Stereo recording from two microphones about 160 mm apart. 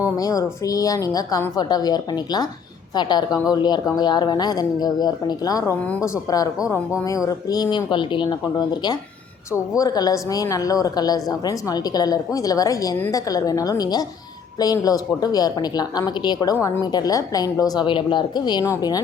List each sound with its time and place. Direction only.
0.0 s speech: 20° left (ahead or behind)
5.8 s a woman's voice: 10° left (ahead or behind)
6.2 s speech: 20° left (ahead or behind)